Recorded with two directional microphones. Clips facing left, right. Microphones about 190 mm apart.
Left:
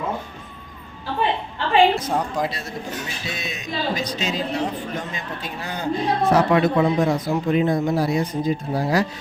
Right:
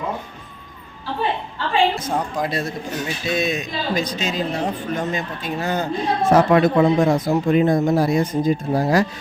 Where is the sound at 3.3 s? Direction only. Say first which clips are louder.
Right 7 dB; 50° right (ahead or behind).